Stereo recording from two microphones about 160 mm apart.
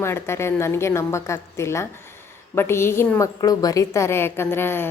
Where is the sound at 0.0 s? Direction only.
15° left (ahead or behind).